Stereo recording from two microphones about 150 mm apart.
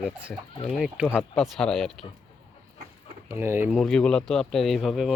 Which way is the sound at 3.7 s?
5° left (ahead or behind).